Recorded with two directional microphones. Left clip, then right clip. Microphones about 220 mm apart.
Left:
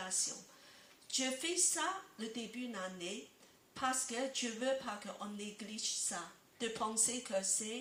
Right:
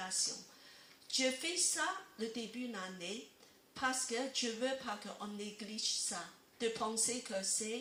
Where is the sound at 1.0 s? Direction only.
35° left (ahead or behind).